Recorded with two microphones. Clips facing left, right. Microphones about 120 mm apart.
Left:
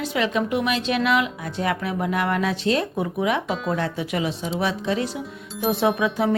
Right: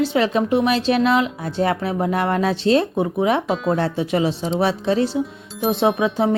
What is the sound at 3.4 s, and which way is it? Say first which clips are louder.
Speech: right 5 dB; centre (ahead or behind).